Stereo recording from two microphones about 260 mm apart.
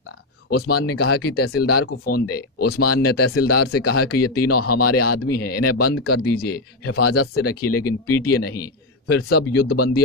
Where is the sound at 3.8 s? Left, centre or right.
Left.